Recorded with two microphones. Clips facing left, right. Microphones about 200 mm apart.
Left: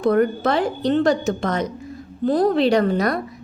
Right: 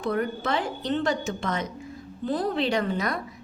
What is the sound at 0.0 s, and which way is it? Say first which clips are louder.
A woman's voice: left 9 dB; 40° left (ahead or behind).